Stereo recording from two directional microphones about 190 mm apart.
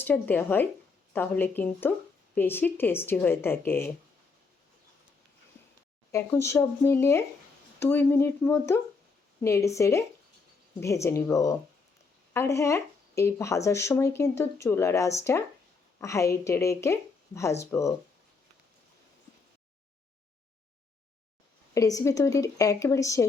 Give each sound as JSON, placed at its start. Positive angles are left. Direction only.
{"t": 0.0, "sound": "speech", "side_deg": 10}
{"t": 6.1, "sound": "speech", "side_deg": 15}
{"t": 21.8, "sound": "speech", "side_deg": 15}